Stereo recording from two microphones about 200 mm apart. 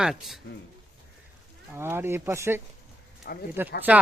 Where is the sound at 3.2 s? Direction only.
50° left (ahead or behind).